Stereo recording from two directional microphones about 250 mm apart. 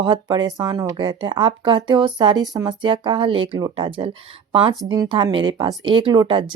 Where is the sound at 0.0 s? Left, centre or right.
Centre.